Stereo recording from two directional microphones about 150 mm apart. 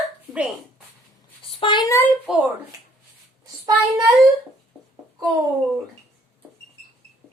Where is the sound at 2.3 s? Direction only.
Centre (ahead or behind).